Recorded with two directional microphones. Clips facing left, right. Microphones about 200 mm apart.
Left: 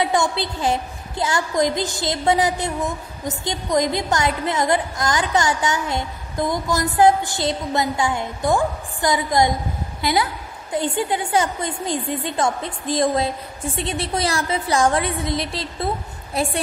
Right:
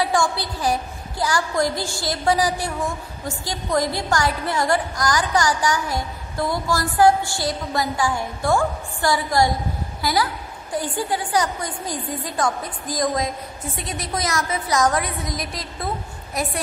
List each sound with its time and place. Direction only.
0.0 s a woman's voice: 20° left (ahead or behind)